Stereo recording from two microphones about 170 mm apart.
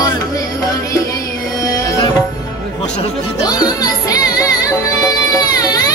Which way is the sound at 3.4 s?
25° left (ahead or behind).